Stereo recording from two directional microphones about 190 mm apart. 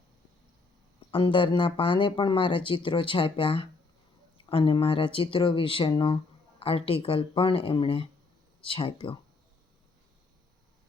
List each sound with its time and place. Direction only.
1.1 s speech: 25° left (ahead or behind)